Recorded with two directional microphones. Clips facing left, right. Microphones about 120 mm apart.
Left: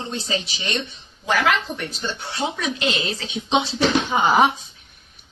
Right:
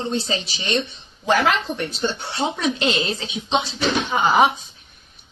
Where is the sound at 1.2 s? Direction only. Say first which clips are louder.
Right 2 dB; 35° right (ahead or behind).